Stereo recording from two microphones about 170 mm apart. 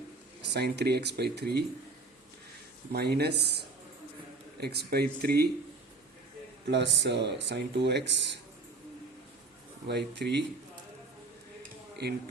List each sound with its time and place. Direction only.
0.4 s speech: 75° right (ahead or behind)
2.9 s speech: 75° right (ahead or behind)
4.6 s speech: 70° right (ahead or behind)
6.7 s speech: 90° right
9.8 s speech: 80° right
12.0 s speech: 75° right (ahead or behind)